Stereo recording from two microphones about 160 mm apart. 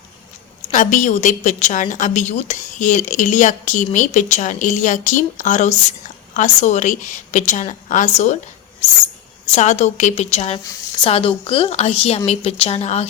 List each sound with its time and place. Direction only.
0.7 s a woman's voice: 50° left (ahead or behind)
9.5 s a woman's voice: 45° left (ahead or behind)